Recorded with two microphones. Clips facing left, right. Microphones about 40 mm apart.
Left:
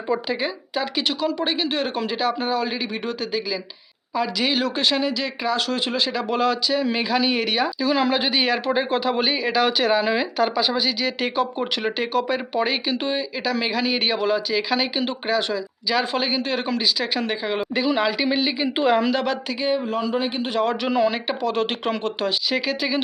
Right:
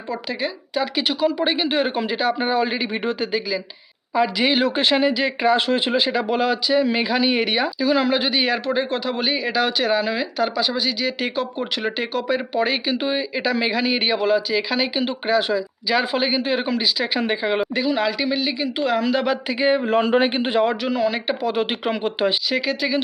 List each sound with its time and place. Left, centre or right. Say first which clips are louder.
0.1 s speech: left 2 dB; centre
17.7 s speech: even; centre
19.1 s speech: right 2 dB; centre
19.5 s speech: right 7 dB; right
20.8 s speech: left 1 dB; centre
21.2 s speech: right 1 dB; centre
22.4 s speech: right 1 dB; centre